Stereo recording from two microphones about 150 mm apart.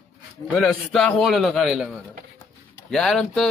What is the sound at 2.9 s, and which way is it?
Speech, 5° left (ahead or behind).